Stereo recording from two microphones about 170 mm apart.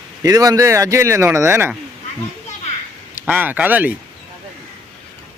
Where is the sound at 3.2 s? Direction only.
10° right (ahead or behind).